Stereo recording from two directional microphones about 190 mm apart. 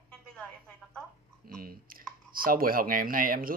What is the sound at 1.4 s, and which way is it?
Speech, 50° right (ahead or behind).